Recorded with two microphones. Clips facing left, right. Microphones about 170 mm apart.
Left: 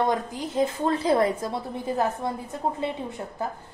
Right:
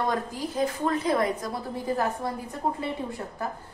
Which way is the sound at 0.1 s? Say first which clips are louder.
Left 2 dB; 20° left (ahead or behind).